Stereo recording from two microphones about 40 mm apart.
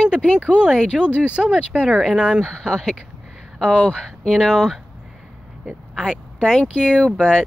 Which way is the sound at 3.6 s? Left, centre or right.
Centre.